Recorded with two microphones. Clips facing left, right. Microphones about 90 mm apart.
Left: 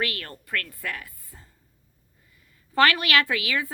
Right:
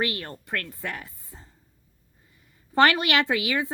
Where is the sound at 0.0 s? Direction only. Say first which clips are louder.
Right 2 dB; 25° right (ahead or behind).